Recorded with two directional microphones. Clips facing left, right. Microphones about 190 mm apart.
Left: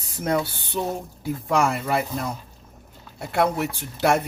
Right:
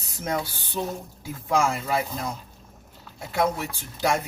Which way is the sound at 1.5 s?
65° left (ahead or behind).